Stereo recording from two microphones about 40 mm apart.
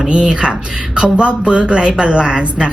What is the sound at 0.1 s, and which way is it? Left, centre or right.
Speech, right.